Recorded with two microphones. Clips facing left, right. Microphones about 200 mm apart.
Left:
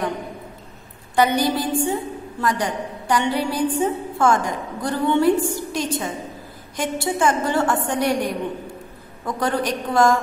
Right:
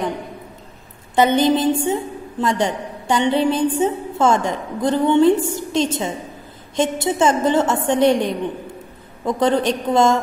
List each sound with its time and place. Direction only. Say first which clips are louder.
1.1 s a woman's voice: right 4 dB; 25° right (ahead or behind)